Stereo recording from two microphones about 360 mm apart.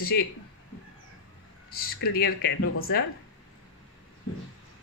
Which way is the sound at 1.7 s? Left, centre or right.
Left.